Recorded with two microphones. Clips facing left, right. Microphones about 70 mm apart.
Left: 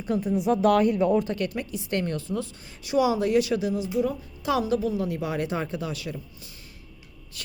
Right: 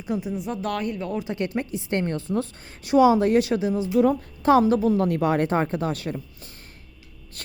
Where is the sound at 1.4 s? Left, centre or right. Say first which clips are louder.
Right 3 dB; right.